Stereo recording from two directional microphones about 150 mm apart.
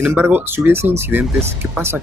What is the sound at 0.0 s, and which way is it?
Speech, 15° right (ahead or behind).